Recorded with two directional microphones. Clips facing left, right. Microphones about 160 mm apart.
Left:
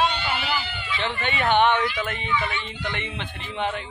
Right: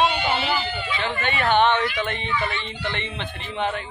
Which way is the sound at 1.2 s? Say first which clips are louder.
Right 1 dB; 20° left (ahead or behind).